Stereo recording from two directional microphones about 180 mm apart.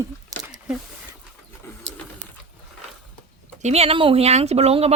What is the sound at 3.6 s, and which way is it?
Speech, 35° right (ahead or behind).